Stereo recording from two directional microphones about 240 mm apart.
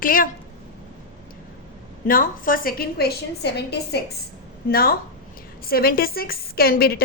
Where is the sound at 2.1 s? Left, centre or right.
Left.